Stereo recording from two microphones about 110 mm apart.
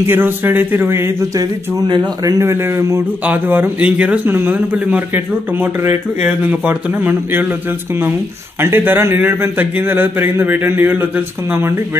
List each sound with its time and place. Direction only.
0.0 s a man's voice: 20° right (ahead or behind)
8.5 s a man's voice: 20° right (ahead or behind)